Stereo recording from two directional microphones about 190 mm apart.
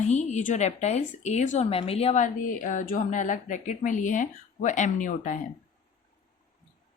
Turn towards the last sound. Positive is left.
turn(degrees=45)  # may be behind; listen again after turning